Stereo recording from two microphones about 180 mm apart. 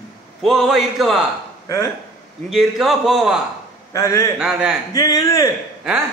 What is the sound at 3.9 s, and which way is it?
Speech, 15° left (ahead or behind).